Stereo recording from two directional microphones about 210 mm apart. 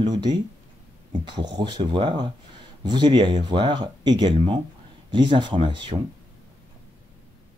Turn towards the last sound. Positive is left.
turn(degrees=-25)  # may be behind; listen again after turning